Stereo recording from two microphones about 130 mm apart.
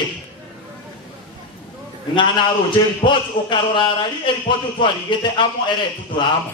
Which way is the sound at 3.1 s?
35° left (ahead or behind).